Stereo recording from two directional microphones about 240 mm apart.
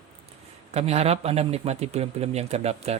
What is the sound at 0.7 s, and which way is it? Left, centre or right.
Speech, right.